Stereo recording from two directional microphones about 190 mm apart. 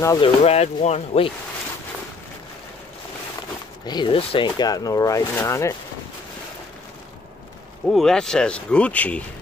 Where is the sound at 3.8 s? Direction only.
25° left (ahead or behind).